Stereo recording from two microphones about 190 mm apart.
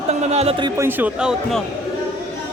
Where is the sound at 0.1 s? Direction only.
35° right (ahead or behind).